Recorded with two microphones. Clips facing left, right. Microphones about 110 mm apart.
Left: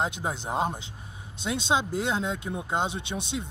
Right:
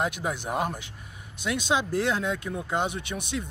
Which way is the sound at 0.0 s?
25° left (ahead or behind).